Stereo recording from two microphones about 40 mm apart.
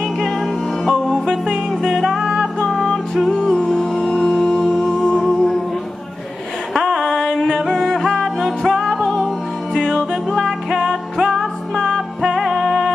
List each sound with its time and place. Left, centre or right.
0.8 s music: centre
2.0 s music: centre
4.8 s music: centre
6.7 s a sound: centre
7.0 s music: centre
9.8 s music: centre
10.8 s music: centre
11.7 s music: centre